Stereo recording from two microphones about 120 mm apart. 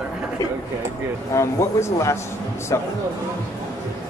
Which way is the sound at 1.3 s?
25° left (ahead or behind).